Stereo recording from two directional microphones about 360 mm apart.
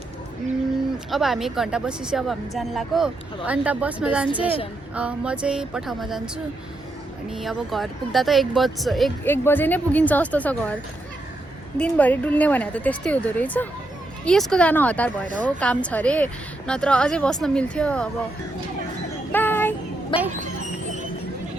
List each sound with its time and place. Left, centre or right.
1.1 s speech: centre
7.3 s speech: centre
11.8 s speech: centre
19.3 s child singing: centre